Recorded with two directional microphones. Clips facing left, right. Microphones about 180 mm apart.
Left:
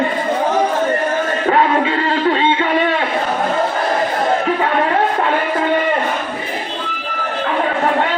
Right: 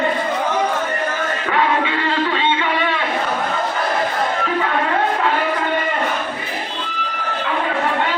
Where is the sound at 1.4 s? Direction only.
40° left (ahead or behind).